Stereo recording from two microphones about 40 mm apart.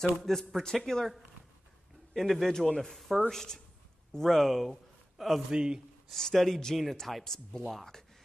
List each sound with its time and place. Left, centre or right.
0.0 s speech: centre
2.1 s speech: centre
5.1 s a sound: centre
5.5 s speech: right
6.0 s speech: centre